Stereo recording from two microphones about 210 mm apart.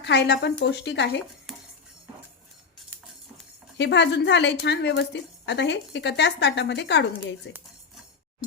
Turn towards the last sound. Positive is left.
turn(degrees=55)  # may be behind; listen again after turning